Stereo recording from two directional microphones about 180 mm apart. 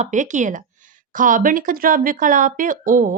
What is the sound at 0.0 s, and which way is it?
Speech, 45° right (ahead or behind).